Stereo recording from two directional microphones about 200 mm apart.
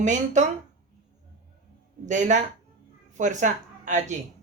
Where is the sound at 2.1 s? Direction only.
40° right (ahead or behind).